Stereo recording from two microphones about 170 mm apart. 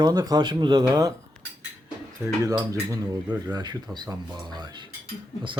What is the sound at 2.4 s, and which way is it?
Speech, 20° right (ahead or behind).